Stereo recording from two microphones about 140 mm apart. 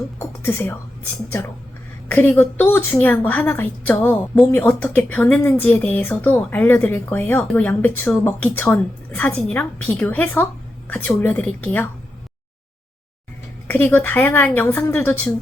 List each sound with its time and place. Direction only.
0.2 s speech: 15° left (ahead or behind)
2.0 s speech: 15° left (ahead or behind)
13.7 s speech: 15° left (ahead or behind)